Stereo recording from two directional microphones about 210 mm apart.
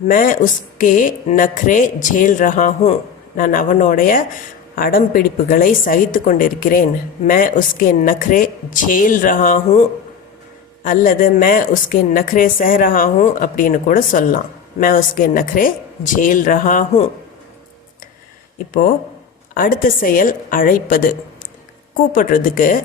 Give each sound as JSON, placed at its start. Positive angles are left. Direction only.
{"t": 0.1, "sound": "a woman's voice", "side_deg": 40}
{"t": 10.8, "sound": "a woman's voice", "side_deg": 40}
{"t": 19.5, "sound": "a woman's voice", "side_deg": 40}
{"t": 22.1, "sound": "a woman's voice", "side_deg": 40}